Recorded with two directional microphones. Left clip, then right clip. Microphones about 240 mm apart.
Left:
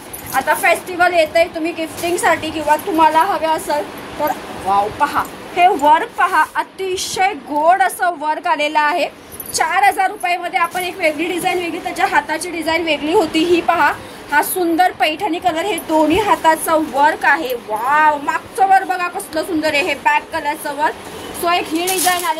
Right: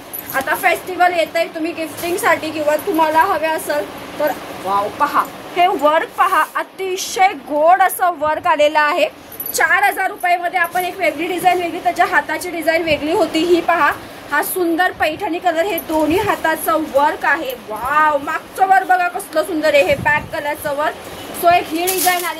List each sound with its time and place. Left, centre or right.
0.5 s a woman's voice: centre
5.0 s a woman's voice: centre